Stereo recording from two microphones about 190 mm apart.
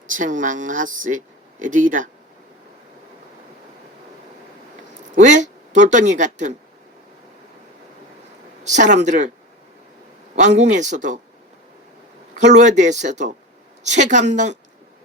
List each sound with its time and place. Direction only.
0.1 s speech: 45° right (ahead or behind)
5.1 s speech: 40° right (ahead or behind)
8.6 s speech: 40° right (ahead or behind)
10.3 s speech: 40° right (ahead or behind)
12.4 s speech: 40° right (ahead or behind)